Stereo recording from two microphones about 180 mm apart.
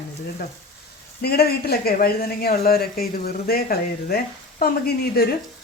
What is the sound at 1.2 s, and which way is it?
Speech, 60° left (ahead or behind).